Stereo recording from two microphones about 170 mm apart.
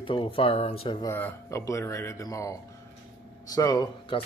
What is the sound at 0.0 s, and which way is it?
Speech, 30° left (ahead or behind).